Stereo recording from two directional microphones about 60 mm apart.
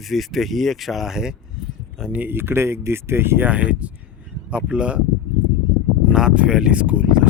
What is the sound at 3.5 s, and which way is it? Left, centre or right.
Speech, right.